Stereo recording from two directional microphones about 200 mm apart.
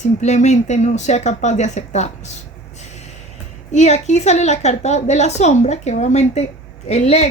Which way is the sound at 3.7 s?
35° left (ahead or behind).